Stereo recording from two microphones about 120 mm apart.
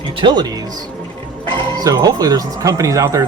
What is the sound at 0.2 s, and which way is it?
Speech, 40° right (ahead or behind).